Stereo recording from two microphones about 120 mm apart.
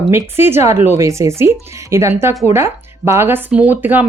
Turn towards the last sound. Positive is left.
turn(degrees=-15)  # may be behind; listen again after turning